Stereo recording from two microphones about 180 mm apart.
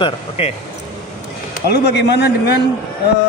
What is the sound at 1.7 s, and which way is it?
Speech, 65° left (ahead or behind).